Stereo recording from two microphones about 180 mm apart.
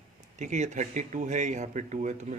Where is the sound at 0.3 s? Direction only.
45° right (ahead or behind).